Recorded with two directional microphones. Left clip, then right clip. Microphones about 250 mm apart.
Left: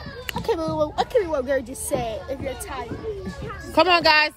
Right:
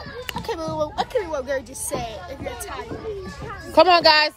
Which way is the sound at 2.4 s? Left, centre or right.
Centre.